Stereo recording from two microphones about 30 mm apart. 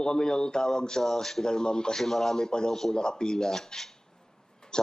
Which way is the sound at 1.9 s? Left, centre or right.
Centre.